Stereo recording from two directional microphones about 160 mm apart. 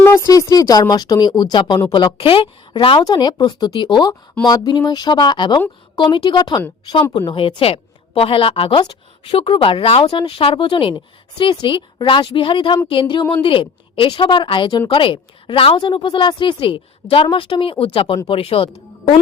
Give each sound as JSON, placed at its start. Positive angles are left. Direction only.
{"t": 0.0, "sound": "a woman's voice", "side_deg": 15}